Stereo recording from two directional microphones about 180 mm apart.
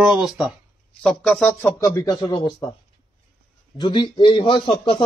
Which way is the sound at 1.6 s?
15° left (ahead or behind).